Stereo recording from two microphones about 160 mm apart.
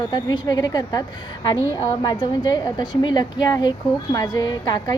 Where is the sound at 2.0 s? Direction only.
25° left (ahead or behind).